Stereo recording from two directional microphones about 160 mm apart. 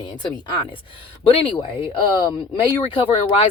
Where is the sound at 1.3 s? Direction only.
35° left (ahead or behind).